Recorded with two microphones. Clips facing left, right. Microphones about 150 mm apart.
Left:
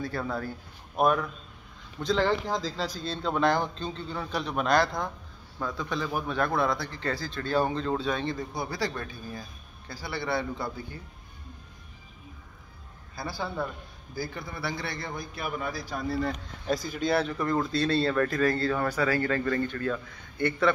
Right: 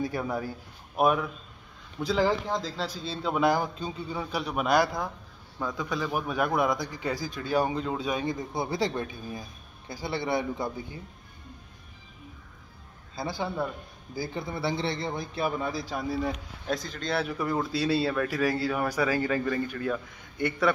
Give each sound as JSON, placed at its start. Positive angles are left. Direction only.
{"t": 0.0, "sound": "a man's voice", "side_deg": -15}
{"t": 13.1, "sound": "a man's voice", "side_deg": -20}
{"t": 16.1, "sound": "speech", "side_deg": -10}
{"t": 16.6, "sound": "speech", "side_deg": 5}
{"t": 17.3, "sound": "speech", "side_deg": -10}